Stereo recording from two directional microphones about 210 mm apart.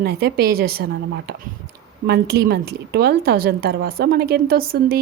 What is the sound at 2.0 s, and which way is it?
Speech, 50° right (ahead or behind).